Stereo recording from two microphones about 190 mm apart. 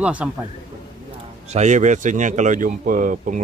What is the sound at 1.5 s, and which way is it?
Speech, 40° right (ahead or behind).